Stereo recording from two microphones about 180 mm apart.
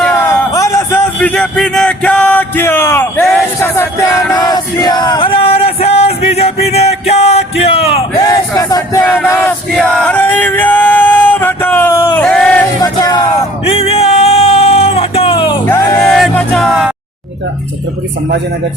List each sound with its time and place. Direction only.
0.5 s speech: 15° left (ahead or behind)
3.6 s music: 15° left (ahead or behind); by 8.0 s 35° left (ahead or behind)
8.1 s a sound: 20° left (ahead or behind)
9.0 s male singing: 10° left (ahead or behind)
12.8 s music: 20° left (ahead or behind)
13.7 s music: 35° left (ahead or behind); by 16.0 s 20° left (ahead or behind)
16.0 s music: centre (ahead or behind)